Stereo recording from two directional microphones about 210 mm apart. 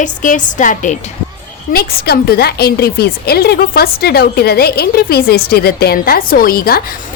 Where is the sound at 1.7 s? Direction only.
50° left (ahead or behind).